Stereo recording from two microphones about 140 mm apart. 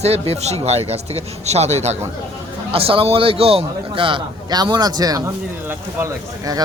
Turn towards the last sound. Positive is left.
turn(degrees=-25)  # may be behind; listen again after turning